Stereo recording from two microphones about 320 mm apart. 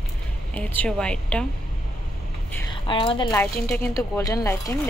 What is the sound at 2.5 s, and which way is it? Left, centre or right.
A woman's voice, centre.